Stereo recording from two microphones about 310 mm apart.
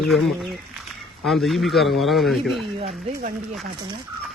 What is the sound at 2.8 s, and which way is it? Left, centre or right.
Speech, right.